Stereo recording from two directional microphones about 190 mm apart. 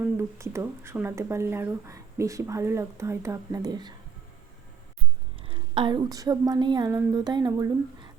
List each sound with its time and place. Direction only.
0.0 s speech: 15° right (ahead or behind)
5.4 s a woman's voice: 25° right (ahead or behind)